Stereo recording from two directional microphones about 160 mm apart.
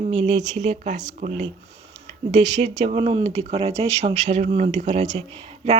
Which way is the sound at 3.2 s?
45° right (ahead or behind).